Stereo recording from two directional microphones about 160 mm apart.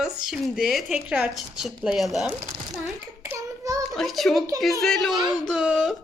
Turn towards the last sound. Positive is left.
turn(degrees=0)  # may be behind; listen again after turning